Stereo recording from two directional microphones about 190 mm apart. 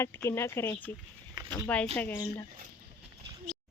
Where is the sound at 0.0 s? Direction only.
15° left (ahead or behind).